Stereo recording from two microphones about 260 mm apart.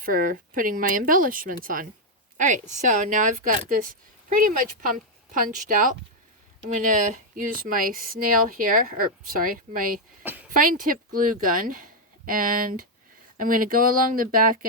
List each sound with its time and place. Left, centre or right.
0.0 s speech: right
6.9 s speech: right